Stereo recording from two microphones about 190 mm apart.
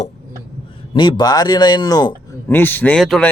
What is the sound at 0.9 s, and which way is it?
Speech, 25° left (ahead or behind).